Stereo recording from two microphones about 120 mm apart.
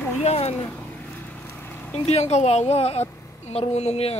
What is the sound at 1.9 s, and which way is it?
Speech, 60° left (ahead or behind).